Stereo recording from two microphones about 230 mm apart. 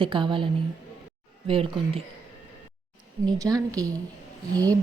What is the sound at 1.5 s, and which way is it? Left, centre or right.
Speech, right.